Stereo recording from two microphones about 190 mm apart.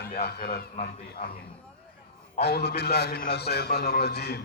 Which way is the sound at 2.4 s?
60° left (ahead or behind).